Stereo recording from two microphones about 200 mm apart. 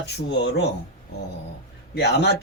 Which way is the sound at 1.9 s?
55° left (ahead or behind).